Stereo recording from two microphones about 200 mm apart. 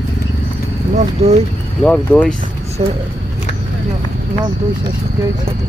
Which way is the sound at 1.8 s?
5° left (ahead or behind).